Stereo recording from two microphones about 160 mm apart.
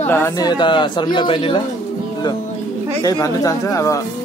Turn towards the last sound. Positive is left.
turn(degrees=20)  # may be behind; listen again after turning